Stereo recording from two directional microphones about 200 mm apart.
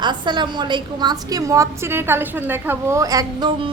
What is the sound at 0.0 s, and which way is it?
A woman's voice, 20° right (ahead or behind).